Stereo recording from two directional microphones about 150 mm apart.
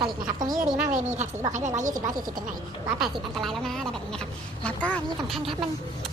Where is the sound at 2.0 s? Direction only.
70° right (ahead or behind).